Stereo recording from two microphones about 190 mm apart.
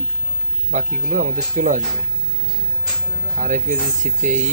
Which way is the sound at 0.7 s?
45° right (ahead or behind).